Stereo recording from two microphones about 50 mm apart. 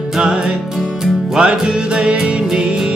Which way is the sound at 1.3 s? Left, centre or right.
Centre.